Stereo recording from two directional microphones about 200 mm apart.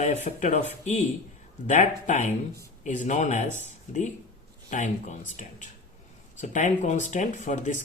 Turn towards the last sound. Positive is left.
turn(degrees=35)  # may be behind; listen again after turning